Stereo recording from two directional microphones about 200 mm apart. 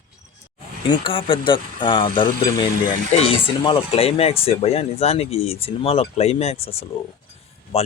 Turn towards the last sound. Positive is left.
turn(degrees=30)  # may be behind; listen again after turning